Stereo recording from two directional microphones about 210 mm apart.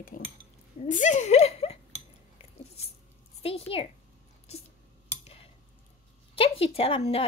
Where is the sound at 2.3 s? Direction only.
30° left (ahead or behind).